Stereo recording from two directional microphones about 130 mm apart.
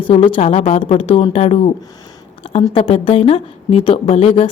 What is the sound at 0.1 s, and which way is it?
Speech, 40° left (ahead or behind).